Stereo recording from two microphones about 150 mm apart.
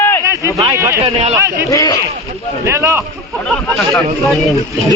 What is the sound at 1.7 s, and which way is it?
Speech, 25° left (ahead or behind).